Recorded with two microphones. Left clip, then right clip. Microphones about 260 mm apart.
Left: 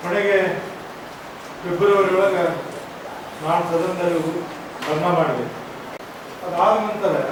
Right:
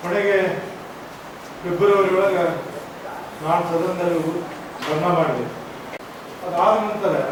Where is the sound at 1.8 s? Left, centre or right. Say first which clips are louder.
Even; centre.